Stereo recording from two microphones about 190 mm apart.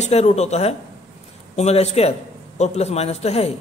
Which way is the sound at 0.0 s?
35° left (ahead or behind).